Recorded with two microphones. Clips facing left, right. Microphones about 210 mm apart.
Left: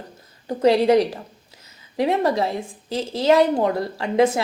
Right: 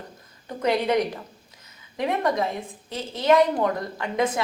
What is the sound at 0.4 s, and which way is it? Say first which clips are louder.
A woman's voice: left 7 dB; 30° left (ahead or behind).